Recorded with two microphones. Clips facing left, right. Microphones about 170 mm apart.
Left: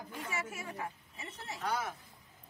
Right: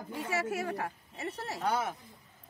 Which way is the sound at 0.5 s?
75° right (ahead or behind).